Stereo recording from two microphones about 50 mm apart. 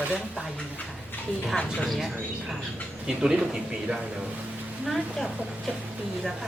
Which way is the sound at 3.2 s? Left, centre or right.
Centre.